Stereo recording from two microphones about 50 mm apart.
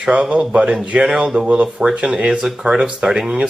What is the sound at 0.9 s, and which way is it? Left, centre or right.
Speech, centre.